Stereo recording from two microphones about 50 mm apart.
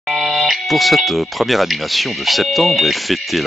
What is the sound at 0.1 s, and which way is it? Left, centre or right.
Speech, centre.